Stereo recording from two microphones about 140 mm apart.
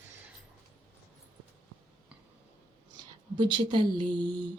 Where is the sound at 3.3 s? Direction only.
35° right (ahead or behind).